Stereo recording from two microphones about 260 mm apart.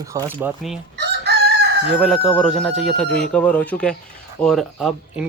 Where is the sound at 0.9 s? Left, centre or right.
Right.